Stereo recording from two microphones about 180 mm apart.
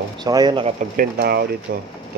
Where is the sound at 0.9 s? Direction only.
60° right (ahead or behind).